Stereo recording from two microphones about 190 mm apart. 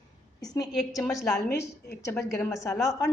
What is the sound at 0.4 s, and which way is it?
Speech, 20° left (ahead or behind).